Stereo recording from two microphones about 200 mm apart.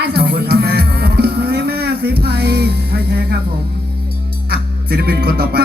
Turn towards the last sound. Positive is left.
turn(degrees=-50)  # may be behind; listen again after turning